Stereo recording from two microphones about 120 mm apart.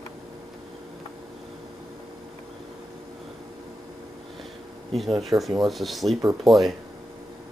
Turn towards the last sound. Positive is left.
turn(degrees=0)  # may be behind; listen again after turning